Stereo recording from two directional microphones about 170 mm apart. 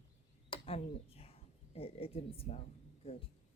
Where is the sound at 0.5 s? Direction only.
30° left (ahead or behind).